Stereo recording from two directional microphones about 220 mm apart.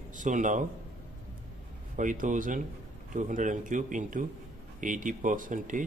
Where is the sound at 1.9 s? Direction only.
35° right (ahead or behind).